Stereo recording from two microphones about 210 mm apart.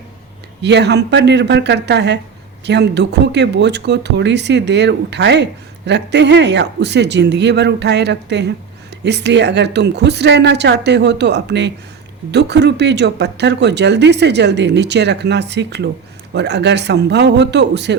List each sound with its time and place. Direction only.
0.6 s speech: 55° right (ahead or behind)